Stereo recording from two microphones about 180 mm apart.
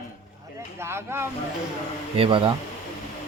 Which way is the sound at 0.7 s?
15° right (ahead or behind).